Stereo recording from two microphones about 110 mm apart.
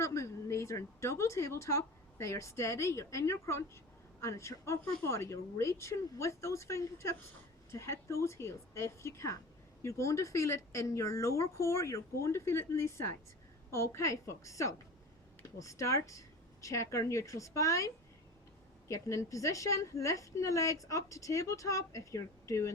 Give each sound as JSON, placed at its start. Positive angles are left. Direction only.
{"t": 0.0, "sound": "a woman's voice", "side_deg": 30}